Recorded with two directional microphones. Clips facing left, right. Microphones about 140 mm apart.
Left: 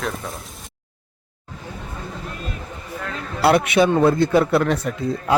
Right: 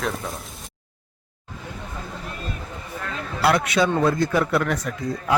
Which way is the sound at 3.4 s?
25° left (ahead or behind).